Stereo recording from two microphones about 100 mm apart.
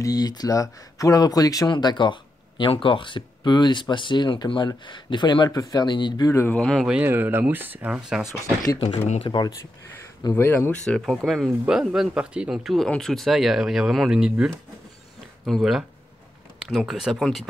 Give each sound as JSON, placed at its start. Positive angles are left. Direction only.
{"t": 0.0, "sound": "speech", "side_deg": 40}
{"t": 1.7, "sound": "speech", "side_deg": 50}
{"t": 6.5, "sound": "speech", "side_deg": 5}
{"t": 7.1, "sound": "speech", "side_deg": -25}
{"t": 9.3, "sound": "speech", "side_deg": 40}
{"t": 10.3, "sound": "speech", "side_deg": 20}
{"t": 11.0, "sound": "speech", "side_deg": 0}
{"t": 11.6, "sound": "speech", "side_deg": -10}